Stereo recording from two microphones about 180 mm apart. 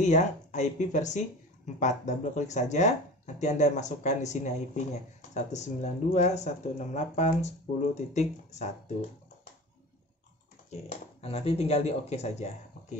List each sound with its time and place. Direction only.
0.0 s speech: 40° left (ahead or behind)
10.7 s speech: 35° left (ahead or behind)